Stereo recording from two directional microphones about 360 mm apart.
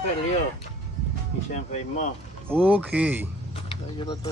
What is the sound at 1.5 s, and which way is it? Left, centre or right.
Speech, centre.